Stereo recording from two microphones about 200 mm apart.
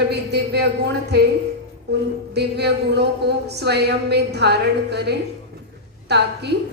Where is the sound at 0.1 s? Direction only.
55° right (ahead or behind).